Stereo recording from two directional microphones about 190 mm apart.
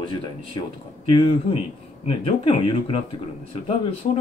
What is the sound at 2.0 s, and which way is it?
Speech, 30° left (ahead or behind).